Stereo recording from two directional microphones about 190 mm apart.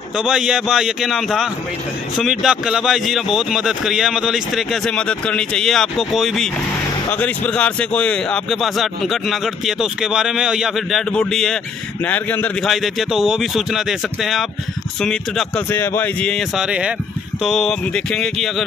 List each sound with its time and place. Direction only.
0.2 s a man's voice: 5° right (ahead or behind)